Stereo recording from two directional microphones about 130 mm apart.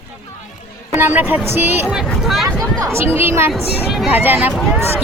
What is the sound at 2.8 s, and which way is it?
A woman's voice, 20° right (ahead or behind).